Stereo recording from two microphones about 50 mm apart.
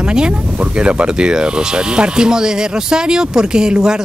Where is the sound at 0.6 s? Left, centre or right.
Right.